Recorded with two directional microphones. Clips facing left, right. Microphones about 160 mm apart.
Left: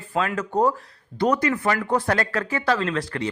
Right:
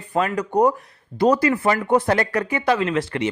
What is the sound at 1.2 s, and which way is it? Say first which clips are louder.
Speech: right 4 dB; 30° right (ahead or behind).